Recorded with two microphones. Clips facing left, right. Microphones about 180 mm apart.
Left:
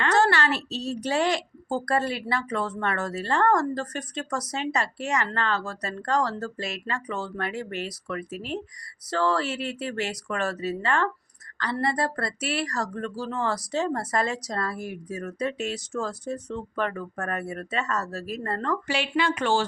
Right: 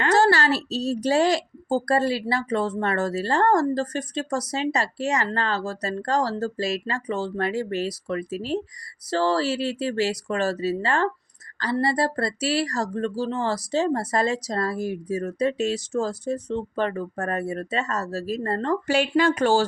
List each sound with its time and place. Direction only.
0.0 s a woman's voice: 35° right (ahead or behind)
18.9 s speech: 45° right (ahead or behind)